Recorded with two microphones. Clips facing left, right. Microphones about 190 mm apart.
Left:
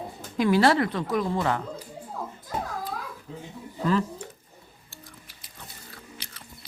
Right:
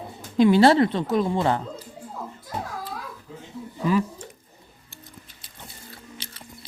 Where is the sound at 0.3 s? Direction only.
25° right (ahead or behind).